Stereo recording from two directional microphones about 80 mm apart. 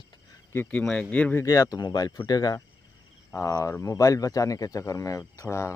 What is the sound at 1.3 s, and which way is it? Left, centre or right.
Speech, left.